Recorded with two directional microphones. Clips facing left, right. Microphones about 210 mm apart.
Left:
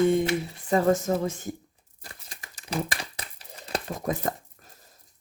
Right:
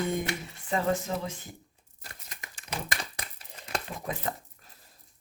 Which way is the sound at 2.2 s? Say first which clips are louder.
Left 4 dB; 35° left (ahead or behind).